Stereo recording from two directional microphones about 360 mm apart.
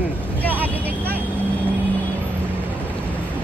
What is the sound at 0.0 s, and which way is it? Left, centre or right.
Vehicle, centre.